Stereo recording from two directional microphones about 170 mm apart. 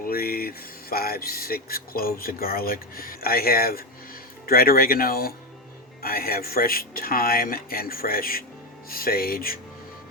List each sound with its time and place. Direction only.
0.0 s speech: 60° left (ahead or behind)